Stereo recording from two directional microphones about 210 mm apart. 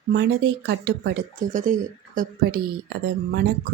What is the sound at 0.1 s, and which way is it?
Speech, 55° right (ahead or behind).